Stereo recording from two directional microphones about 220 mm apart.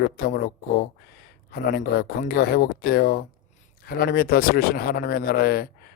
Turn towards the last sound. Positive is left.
turn(degrees=45)  # may be behind; listen again after turning